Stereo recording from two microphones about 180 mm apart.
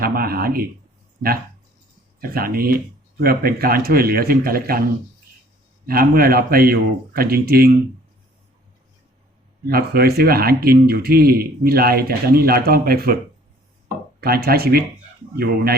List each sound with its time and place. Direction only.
0.0 s a sound: 55° right (ahead or behind)
2.2 s speech: 55° right (ahead or behind)
5.8 s speech: 55° right (ahead or behind)
9.6 s speech: 55° right (ahead or behind)
14.2 s speech: 55° right (ahead or behind)